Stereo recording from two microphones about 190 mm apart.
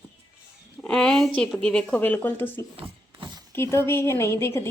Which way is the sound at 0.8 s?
5° left (ahead or behind).